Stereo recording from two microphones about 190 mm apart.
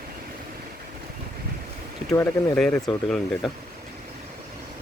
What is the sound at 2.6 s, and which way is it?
Speech, 5° left (ahead or behind).